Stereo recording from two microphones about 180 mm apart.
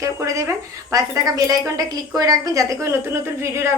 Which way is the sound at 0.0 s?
15° right (ahead or behind).